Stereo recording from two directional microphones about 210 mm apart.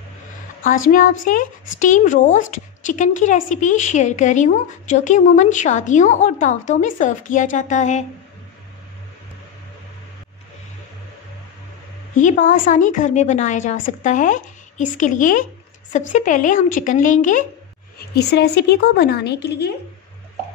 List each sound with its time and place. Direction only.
0.6 s a woman's voice: 40° left (ahead or behind)
12.2 s a woman's voice: 35° left (ahead or behind)
17.9 s speech: 50° left (ahead or behind)